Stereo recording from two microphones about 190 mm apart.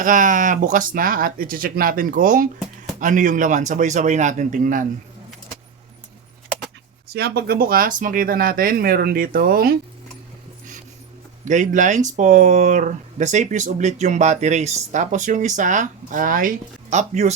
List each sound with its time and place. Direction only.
0.0 s speech: 45° right (ahead or behind)
7.1 s speech: 55° right (ahead or behind)
11.4 s speech: 40° right (ahead or behind)